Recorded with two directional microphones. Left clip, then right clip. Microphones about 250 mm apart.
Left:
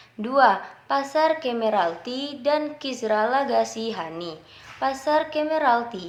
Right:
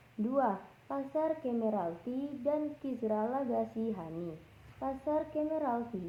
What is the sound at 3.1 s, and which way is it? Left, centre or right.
A woman's voice, centre.